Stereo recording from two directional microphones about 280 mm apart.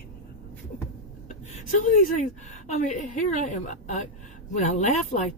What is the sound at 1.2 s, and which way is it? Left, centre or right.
A woman's voice, left.